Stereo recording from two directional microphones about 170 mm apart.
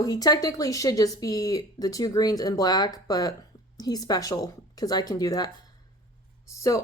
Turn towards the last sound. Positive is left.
turn(degrees=20)  # may be behind; listen again after turning